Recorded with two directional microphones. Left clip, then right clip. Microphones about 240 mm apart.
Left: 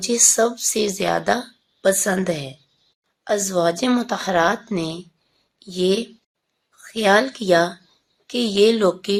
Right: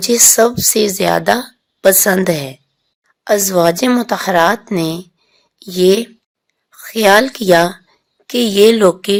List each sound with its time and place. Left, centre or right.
0.0 s a woman's voice: right